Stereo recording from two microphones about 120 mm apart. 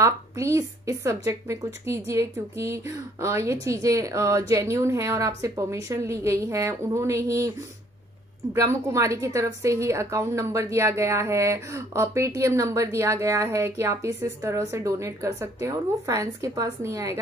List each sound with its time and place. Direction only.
0.0 s a woman's voice: 25° right (ahead or behind)
8.5 s a woman's voice: 25° right (ahead or behind)